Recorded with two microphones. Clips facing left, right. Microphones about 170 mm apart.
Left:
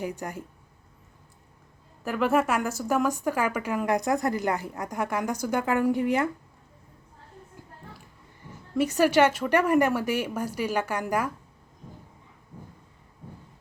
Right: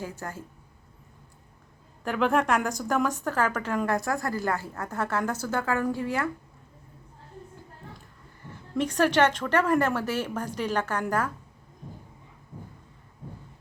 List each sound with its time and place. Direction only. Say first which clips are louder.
0.0 s speech: left 3 dB; 15° left (ahead or behind)
2.0 s speech: even; 5° left (ahead or behind)
8.7 s speech: left 2 dB; 10° left (ahead or behind)